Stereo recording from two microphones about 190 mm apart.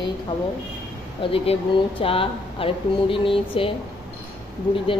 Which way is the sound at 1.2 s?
30° left (ahead or behind).